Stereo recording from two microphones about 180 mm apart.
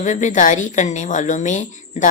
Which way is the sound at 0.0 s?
45° left (ahead or behind).